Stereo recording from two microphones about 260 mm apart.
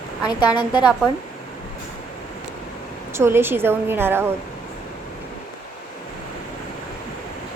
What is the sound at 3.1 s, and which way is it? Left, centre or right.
A woman's voice, centre.